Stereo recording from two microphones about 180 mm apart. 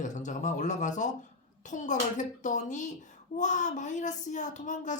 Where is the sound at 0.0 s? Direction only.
45° left (ahead or behind).